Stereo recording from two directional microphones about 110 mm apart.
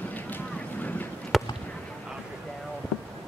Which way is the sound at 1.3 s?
Centre (ahead or behind).